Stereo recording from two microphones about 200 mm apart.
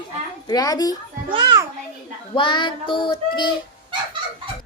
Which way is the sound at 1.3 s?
20° right (ahead or behind).